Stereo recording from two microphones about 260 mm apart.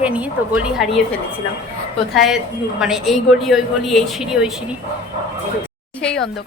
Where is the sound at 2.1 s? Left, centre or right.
Centre.